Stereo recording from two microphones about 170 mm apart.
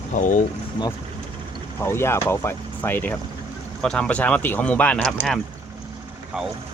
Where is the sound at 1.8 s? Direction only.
15° left (ahead or behind).